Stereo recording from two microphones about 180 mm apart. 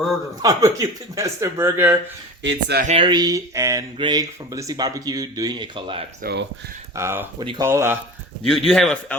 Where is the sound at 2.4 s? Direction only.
75° right (ahead or behind).